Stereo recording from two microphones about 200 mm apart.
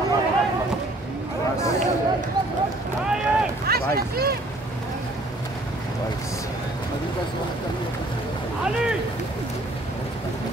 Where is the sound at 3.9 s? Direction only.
50° right (ahead or behind).